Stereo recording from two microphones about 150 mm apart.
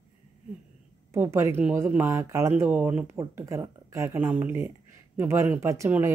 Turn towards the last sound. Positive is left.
turn(degrees=-20)  # may be behind; listen again after turning